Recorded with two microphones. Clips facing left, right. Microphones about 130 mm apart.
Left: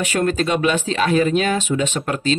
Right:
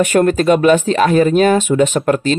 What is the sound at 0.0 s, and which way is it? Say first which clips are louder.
Speech: right 7 dB; 50° right (ahead or behind).